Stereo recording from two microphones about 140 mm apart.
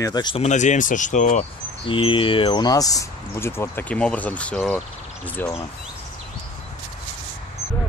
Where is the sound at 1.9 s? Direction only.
40° left (ahead or behind); by 4.8 s 10° left (ahead or behind).